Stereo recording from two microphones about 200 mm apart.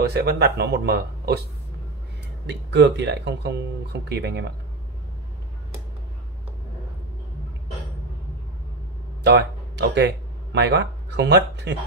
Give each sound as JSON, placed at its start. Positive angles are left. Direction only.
{"t": 0.0, "sound": "speech", "side_deg": -55}
{"t": 2.4, "sound": "speech", "side_deg": -60}
{"t": 9.2, "sound": "speech", "side_deg": -55}